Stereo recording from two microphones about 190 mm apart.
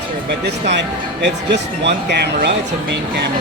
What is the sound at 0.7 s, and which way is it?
Speech, 65° right (ahead or behind).